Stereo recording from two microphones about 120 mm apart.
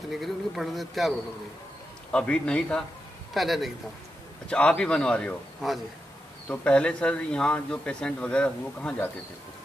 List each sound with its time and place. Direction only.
0.1 s speech: centre (ahead or behind)
2.1 s speech: 10° left (ahead or behind)